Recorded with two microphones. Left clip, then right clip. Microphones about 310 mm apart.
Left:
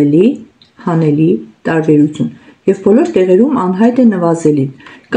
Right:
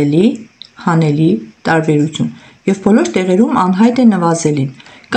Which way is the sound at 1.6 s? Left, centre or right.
Right.